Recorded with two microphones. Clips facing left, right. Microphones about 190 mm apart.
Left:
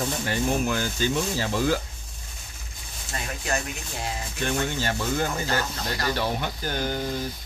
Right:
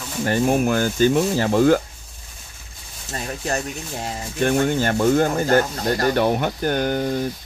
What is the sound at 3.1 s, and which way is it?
Speech, 40° right (ahead or behind).